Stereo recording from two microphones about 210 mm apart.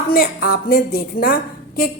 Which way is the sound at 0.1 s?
45° left (ahead or behind).